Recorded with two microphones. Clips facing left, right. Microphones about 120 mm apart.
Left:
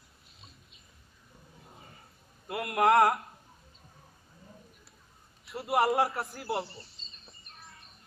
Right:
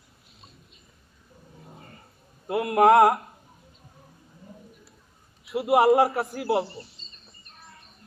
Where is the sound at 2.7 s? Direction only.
30° right (ahead or behind).